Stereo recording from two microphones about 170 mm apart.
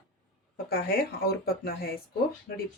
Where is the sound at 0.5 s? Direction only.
65° left (ahead or behind).